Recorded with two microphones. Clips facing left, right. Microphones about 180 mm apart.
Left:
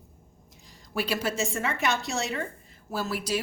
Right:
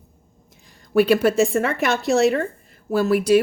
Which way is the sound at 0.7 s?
55° right (ahead or behind).